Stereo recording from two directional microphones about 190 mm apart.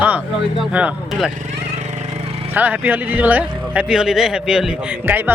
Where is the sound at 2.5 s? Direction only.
10° right (ahead or behind).